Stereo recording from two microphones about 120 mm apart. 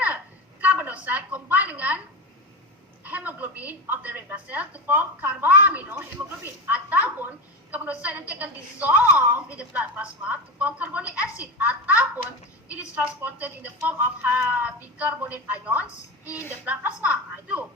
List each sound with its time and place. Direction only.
0.6 s a sound: 15° right (ahead or behind)
3.0 s a woman's voice: 15° right (ahead or behind)
16.2 s a woman's voice: 25° left (ahead or behind)
16.6 s a woman's voice: 10° right (ahead or behind)